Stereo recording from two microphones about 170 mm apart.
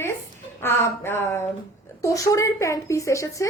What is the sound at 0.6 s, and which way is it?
A child's voice, 15° left (ahead or behind).